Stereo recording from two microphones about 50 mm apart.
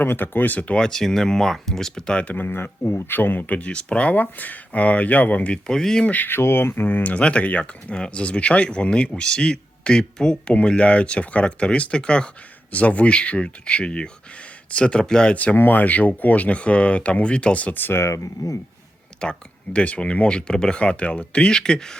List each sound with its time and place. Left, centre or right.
0.0 s speech: left
0.8 s speech: centre
2.0 s speech: left
2.3 s speech: left
3.2 s speech: left
3.7 s speech: left
5.6 s speech: centre
6.1 s speech: left
7.0 s speech: left
15.5 s speech: left
17.9 s speech: left
19.2 s speech: centre